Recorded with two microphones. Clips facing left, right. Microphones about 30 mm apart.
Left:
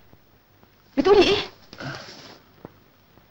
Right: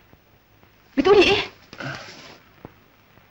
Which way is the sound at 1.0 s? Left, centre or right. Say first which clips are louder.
Right 1 dB; centre.